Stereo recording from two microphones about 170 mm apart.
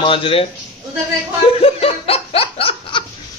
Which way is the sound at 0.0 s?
30° left (ahead or behind).